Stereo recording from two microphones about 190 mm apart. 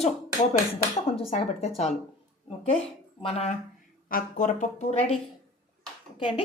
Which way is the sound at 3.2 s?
35° left (ahead or behind).